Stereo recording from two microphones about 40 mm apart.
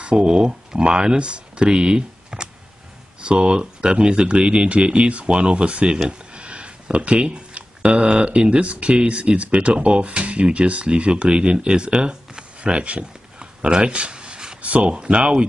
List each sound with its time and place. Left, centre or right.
0.0 s speech: right
14.6 s speech: right